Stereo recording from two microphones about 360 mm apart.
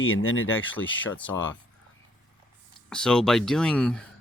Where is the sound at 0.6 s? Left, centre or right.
Centre.